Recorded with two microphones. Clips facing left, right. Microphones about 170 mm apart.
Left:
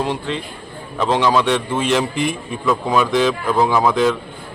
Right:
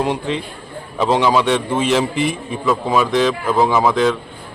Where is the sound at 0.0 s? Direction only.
5° right (ahead or behind).